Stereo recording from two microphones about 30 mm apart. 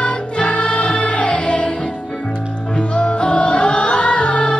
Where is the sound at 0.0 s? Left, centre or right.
Left.